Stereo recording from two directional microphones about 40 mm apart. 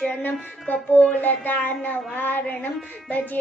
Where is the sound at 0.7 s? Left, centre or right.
Left.